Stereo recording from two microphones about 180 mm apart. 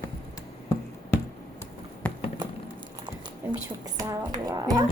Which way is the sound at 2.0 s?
5° left (ahead or behind).